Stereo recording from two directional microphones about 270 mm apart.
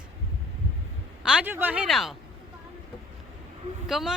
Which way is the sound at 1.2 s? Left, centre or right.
Centre.